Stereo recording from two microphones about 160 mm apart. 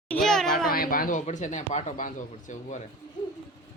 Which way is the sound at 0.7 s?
65° left (ahead or behind).